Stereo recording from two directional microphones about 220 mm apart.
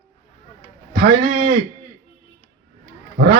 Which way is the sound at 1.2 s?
40° right (ahead or behind).